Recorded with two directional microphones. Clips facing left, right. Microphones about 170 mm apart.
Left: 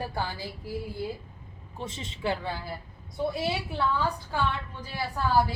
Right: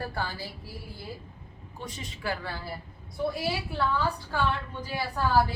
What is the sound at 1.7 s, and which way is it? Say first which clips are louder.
Speech: left 2 dB; 25° left (ahead or behind).